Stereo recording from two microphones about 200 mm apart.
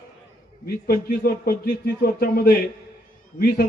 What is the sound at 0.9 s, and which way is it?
Speech, 50° left (ahead or behind).